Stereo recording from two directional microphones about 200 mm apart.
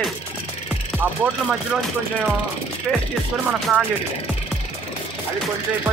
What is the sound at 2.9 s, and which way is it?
Music, 5° left (ahead or behind).